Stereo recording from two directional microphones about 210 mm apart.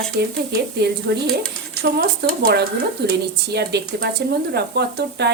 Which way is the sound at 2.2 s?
50° right (ahead or behind).